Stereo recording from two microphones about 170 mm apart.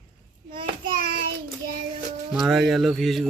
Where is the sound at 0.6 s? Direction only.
30° right (ahead or behind).